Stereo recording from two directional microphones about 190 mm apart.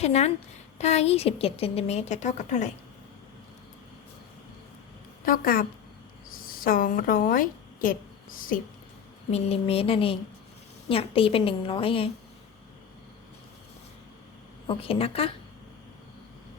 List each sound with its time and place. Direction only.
0.0 s a woman's voice: 35° left (ahead or behind)
5.2 s a woman's voice: 50° left (ahead or behind)
9.3 s a woman's voice: 30° left (ahead or behind)
14.7 s a woman's voice: 30° left (ahead or behind)